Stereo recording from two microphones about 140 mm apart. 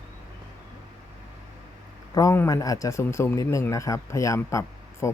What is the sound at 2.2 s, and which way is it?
A man's voice, 20° left (ahead or behind).